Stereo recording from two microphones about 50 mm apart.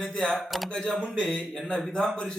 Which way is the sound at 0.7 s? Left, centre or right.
Centre.